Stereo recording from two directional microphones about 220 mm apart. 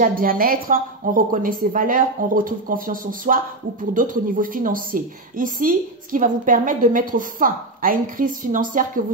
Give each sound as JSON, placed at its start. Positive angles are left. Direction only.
{"t": 0.0, "sound": "a woman's voice", "side_deg": -40}